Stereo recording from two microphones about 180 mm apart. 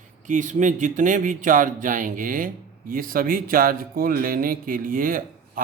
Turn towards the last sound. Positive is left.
turn(degrees=-50)  # may be behind; listen again after turning